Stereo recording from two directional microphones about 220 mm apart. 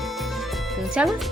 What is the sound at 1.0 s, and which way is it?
Speech, 5° right (ahead or behind).